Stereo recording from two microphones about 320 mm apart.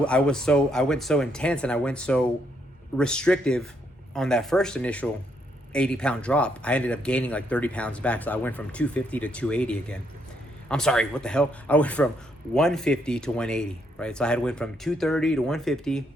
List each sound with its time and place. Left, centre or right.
0.0 s a man's voice: centre